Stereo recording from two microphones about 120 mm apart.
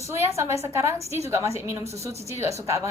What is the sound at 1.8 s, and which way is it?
Speech, 60° right (ahead or behind).